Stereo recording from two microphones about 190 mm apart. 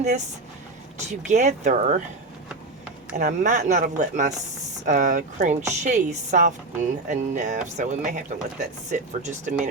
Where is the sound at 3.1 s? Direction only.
40° right (ahead or behind).